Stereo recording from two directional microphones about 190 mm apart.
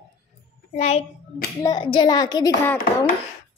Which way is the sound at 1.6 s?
25° left (ahead or behind).